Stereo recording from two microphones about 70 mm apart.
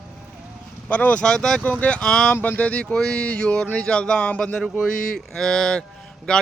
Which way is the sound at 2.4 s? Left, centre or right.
Left.